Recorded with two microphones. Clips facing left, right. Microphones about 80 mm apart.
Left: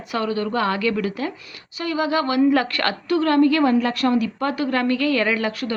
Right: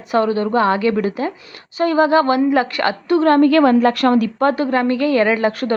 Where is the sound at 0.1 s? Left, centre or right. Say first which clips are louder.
Right 7 dB; right.